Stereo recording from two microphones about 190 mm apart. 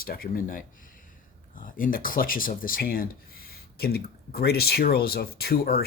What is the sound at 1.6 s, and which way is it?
Speech, 45° left (ahead or behind).